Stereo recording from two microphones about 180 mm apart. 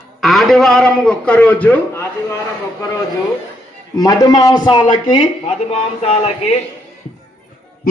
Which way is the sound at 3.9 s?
20° left (ahead or behind).